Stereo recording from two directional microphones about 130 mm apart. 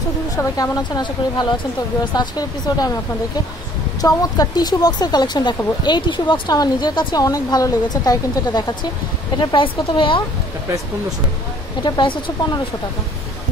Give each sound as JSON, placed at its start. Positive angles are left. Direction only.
{"t": 0.4, "sound": "speech", "side_deg": 30}
{"t": 4.0, "sound": "speech", "side_deg": 30}
{"t": 11.8, "sound": "speech", "side_deg": 35}